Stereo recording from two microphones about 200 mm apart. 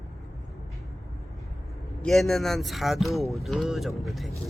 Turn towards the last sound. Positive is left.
turn(degrees=0)  # may be behind; listen again after turning